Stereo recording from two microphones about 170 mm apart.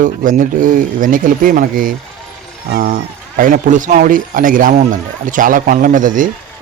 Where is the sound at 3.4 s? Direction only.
50° right (ahead or behind).